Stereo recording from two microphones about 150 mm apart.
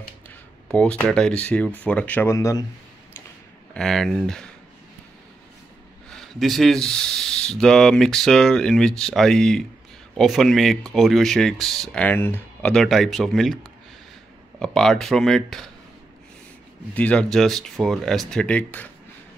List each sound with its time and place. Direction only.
0.7 s speech: 5° left (ahead or behind)
2.3 s speech: 25° left (ahead or behind)
3.7 s speech: 5° left (ahead or behind)
6.0 s speech: centre (ahead or behind)
12.7 s speech: centre (ahead or behind)
14.6 s speech: 5° left (ahead or behind)
16.9 s speech: 10° left (ahead or behind)